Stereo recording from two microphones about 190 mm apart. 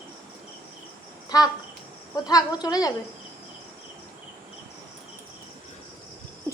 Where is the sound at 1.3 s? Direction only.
20° left (ahead or behind).